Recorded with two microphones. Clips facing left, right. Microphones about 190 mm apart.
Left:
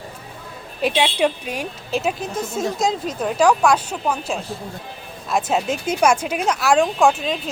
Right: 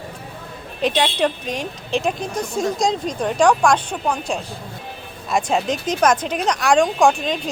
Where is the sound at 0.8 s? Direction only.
5° left (ahead or behind).